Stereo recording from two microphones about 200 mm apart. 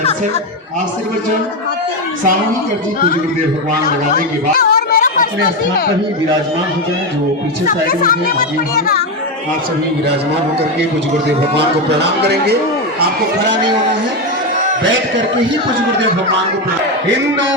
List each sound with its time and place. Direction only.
4.5 s a sound: 45° left (ahead or behind)
7.7 s speech: 45° left (ahead or behind)
11.5 s a man's voice: 55° right (ahead or behind)